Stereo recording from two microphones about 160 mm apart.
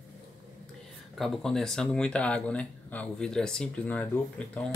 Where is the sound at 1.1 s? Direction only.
Centre (ahead or behind).